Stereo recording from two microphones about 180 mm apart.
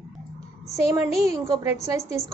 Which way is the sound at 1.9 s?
40° left (ahead or behind).